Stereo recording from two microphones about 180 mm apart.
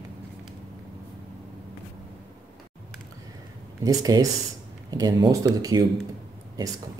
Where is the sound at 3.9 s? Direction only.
20° right (ahead or behind).